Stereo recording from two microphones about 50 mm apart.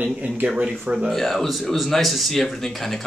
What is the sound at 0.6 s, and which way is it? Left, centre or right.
Speech, right.